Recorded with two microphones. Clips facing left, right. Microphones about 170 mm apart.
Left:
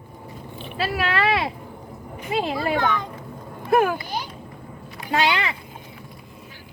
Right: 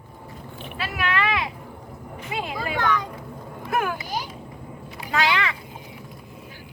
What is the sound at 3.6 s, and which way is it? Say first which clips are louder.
Speech: left 7 dB; 30° left (ahead or behind).